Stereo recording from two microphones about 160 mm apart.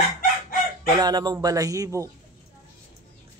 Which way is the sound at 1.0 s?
25° right (ahead or behind).